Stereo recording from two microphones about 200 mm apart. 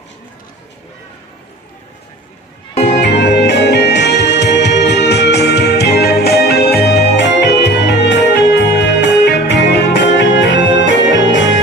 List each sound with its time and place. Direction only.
2.9 s music: 55° left (ahead or behind)